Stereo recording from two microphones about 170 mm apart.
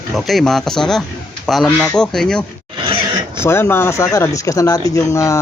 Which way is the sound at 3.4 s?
15° left (ahead or behind).